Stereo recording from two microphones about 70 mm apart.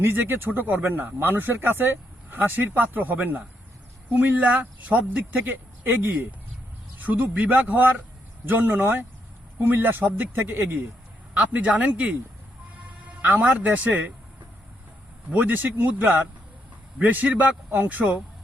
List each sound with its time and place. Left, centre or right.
0.0 s speech: right
13.2 s speech: right
15.3 s speech: right